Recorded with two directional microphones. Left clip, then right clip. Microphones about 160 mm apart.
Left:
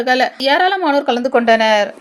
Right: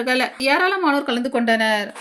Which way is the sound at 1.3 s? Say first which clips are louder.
Left 7 dB; 5° right (ahead or behind).